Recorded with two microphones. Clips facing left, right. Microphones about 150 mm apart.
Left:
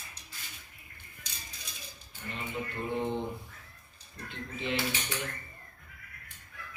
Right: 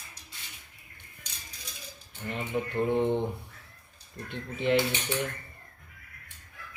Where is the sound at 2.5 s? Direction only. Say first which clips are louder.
Right 7 dB; 60° right (ahead or behind).